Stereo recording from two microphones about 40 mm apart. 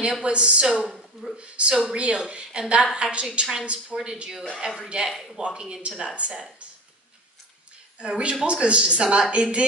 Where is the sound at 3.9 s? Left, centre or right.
Centre.